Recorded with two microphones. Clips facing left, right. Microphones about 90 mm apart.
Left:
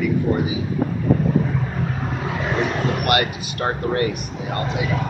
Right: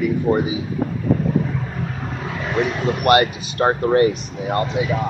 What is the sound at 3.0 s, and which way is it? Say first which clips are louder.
Speech: right 5 dB; 30° right (ahead or behind).